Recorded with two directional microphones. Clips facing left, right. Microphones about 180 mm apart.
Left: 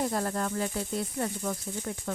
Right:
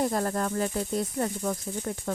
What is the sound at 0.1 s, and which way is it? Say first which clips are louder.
Speech: right 2 dB; 45° right (ahead or behind).